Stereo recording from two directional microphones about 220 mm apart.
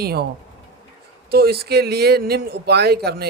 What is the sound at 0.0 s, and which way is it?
Speech, 45° right (ahead or behind).